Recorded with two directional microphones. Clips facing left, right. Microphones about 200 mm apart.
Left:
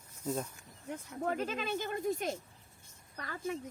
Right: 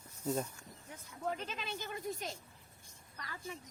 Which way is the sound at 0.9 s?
65° left (ahead or behind).